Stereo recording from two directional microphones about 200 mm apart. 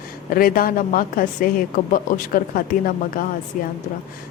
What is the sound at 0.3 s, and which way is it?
A woman's voice, 45° left (ahead or behind).